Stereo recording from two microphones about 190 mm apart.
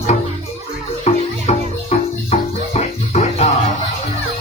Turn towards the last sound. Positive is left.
turn(degrees=35)  # may be behind; listen again after turning